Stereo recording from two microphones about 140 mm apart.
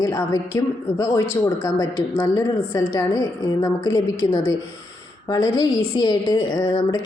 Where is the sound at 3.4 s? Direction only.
25° left (ahead or behind).